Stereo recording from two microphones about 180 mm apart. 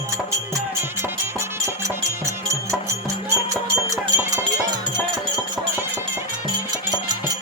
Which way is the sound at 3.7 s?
15° right (ahead or behind).